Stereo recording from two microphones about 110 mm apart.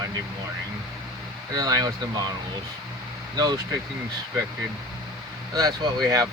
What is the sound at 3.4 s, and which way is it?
Speech, 40° right (ahead or behind).